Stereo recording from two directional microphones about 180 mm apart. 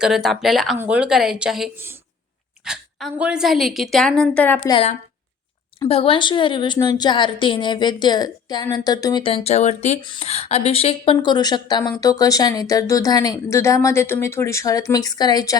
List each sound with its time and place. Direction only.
0.0 s a woman's voice: centre (ahead or behind)
4.6 s a woman's voice: 25° left (ahead or behind)
5.9 s a woman's voice: 30° left (ahead or behind)